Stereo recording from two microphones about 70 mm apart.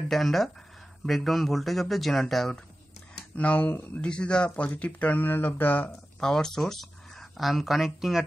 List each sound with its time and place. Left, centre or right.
0.1 s speech: centre
3.3 s speech: left
4.0 s speech: centre
5.9 s speech: centre